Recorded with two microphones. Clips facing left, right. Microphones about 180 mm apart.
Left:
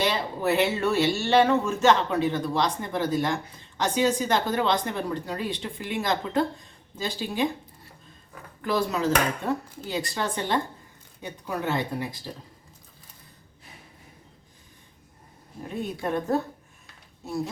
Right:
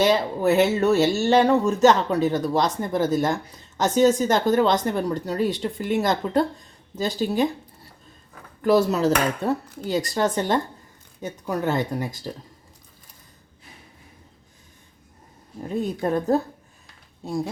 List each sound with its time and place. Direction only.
0.0 s speech: 45° right (ahead or behind)
8.6 s speech: 40° right (ahead or behind)
16.0 s speech: 35° right (ahead or behind)